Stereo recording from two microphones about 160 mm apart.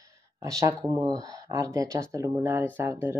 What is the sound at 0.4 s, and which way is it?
Speech, 20° right (ahead or behind).